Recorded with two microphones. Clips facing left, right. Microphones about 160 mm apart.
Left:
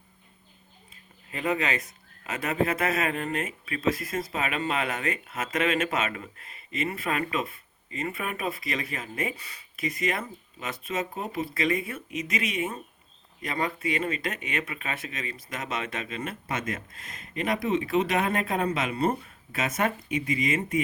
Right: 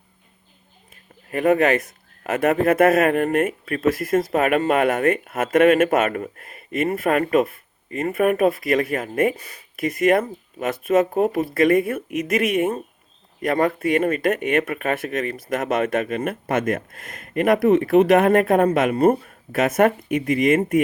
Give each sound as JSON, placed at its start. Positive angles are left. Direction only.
{"t": 1.3, "sound": "a man's voice", "side_deg": -55}